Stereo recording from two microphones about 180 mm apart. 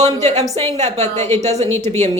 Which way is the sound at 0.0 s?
40° right (ahead or behind).